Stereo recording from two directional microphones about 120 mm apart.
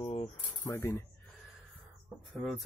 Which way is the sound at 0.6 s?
25° left (ahead or behind).